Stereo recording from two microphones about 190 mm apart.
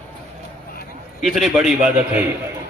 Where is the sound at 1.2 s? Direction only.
Centre (ahead or behind).